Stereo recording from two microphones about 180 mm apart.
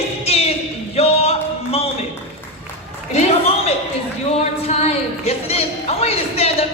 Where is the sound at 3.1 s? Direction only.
35° left (ahead or behind).